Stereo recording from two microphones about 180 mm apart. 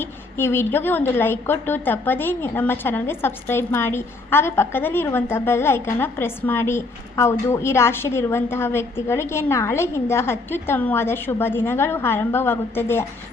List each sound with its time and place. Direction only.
0.0 s a woman's voice: 10° left (ahead or behind)